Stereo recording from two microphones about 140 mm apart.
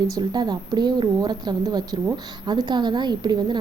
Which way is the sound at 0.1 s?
30° right (ahead or behind).